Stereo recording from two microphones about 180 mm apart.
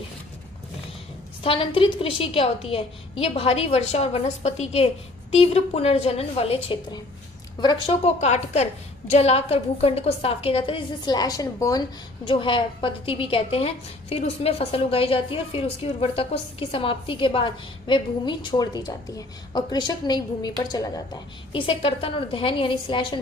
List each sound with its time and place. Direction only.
1.5 s a woman's voice: 30° left (ahead or behind)